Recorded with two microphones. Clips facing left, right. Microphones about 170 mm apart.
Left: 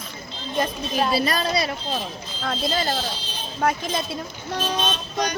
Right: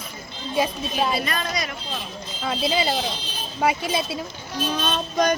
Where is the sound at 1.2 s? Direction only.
35° left (ahead or behind).